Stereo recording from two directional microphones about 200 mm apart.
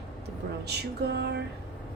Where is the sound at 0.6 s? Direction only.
55° right (ahead or behind).